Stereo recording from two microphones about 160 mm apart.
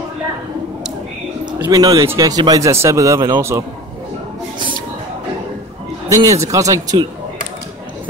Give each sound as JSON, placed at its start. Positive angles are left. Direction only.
{"t": 1.6, "sound": "speech", "side_deg": -25}
{"t": 6.0, "sound": "speech", "side_deg": -20}